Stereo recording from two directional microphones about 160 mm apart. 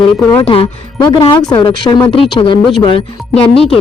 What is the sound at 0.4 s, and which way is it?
Speech, 35° left (ahead or behind).